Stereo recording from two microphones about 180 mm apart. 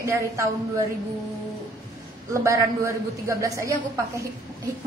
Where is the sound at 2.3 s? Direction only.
15° right (ahead or behind).